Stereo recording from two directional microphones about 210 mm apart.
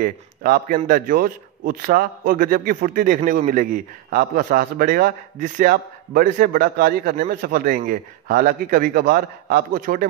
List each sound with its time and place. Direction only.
0.0 s a man's voice: 40° right (ahead or behind)